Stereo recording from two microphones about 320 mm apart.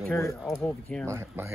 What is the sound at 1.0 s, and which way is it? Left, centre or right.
Speech, centre.